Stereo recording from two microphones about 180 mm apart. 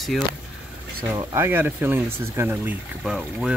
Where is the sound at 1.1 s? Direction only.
15° right (ahead or behind).